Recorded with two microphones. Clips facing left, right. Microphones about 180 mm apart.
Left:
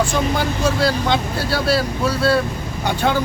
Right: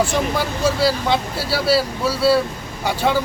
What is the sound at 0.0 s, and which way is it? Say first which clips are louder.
Speech: even; 5° right (ahead or behind).